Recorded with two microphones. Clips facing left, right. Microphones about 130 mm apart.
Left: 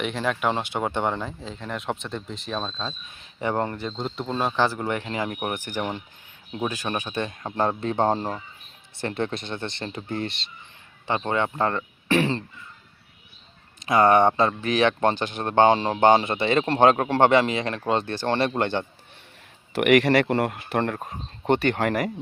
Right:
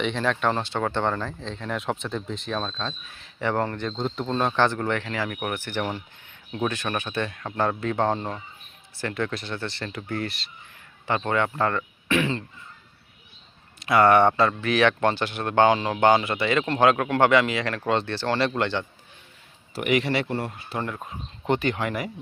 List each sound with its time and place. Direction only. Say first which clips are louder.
0.0 s speech: right 1 dB; 5° left (ahead or behind)
3.8 s speech: right 2 dB; 5° left (ahead or behind)
5.0 s a man's voice: left 1 dB; 25° left (ahead or behind)
5.5 s a man's voice: even; 15° left (ahead or behind); by 12.4 s 35° left (ahead or behind)
13.7 s a man's voice: even; 20° left (ahead or behind)
18.0 s speech: even; 45° left (ahead or behind)
18.3 s a man's voice: left 1 dB; 25° left (ahead or behind)
18.6 s speech: left 1 dB; 50° left (ahead or behind)
19.8 s speech: left 6 dB; 60° left (ahead or behind)
20.3 s speech: left 6 dB; 70° left (ahead or behind)
21.0 s speech: left 2 dB; 45° left (ahead or behind)